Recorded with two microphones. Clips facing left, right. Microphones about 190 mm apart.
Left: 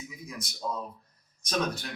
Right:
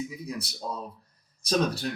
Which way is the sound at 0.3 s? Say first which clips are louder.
Right 1 dB; 35° right (ahead or behind).